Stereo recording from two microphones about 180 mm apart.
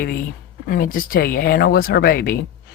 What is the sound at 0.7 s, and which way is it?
Speech, 50° left (ahead or behind).